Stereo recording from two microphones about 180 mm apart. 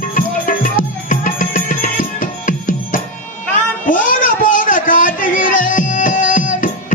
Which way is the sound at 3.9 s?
50° left (ahead or behind).